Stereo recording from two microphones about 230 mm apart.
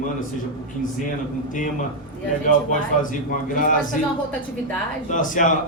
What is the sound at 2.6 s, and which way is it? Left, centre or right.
A man's voice, left.